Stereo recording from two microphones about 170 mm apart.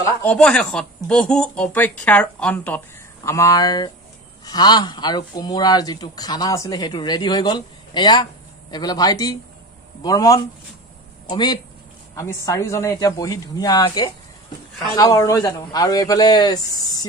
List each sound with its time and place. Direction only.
0.2 s speech: 5° left (ahead or behind)
3.3 s speech: 20° left (ahead or behind)